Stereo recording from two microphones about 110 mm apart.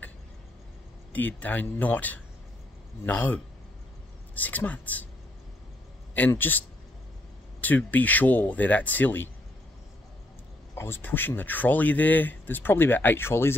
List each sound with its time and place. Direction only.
1.1 s speech: 15° left (ahead or behind)
4.4 s speech: 15° left (ahead or behind)
6.1 s speech: 15° left (ahead or behind)
7.6 s speech: 15° left (ahead or behind)
10.7 s speech: 20° left (ahead or behind)